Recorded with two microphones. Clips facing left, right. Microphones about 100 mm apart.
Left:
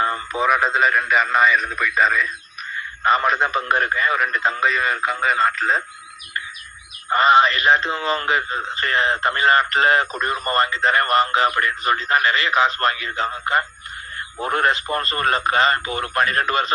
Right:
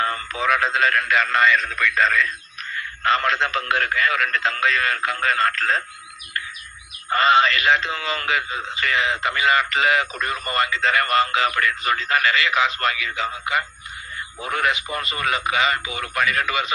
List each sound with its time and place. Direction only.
0.0 s radio: 10° left (ahead or behind)
0.7 s speech: 10° left (ahead or behind)
7.1 s speech: 25° left (ahead or behind)
8.5 s a man's voice: 40° left (ahead or behind)